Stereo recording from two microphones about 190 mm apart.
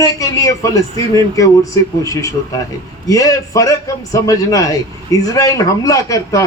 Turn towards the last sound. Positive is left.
turn(degrees=20)  # may be behind; listen again after turning